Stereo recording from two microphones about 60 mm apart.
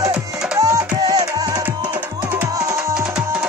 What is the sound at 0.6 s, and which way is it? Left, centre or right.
Music, right.